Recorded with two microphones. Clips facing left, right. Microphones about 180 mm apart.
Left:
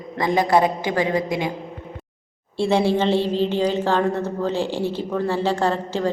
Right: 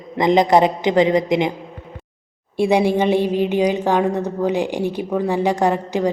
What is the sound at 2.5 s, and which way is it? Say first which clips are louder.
Speech: right 3 dB; 15° right (ahead or behind).